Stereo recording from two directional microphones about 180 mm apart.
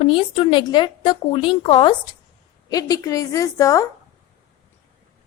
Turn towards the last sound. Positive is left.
turn(degrees=20)  # may be behind; listen again after turning